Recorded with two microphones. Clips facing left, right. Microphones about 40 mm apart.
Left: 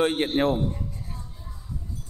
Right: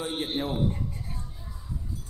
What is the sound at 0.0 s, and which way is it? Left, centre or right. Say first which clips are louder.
Speech: left 9 dB; left.